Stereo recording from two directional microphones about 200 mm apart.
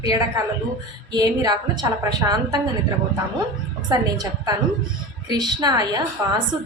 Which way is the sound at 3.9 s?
20° right (ahead or behind).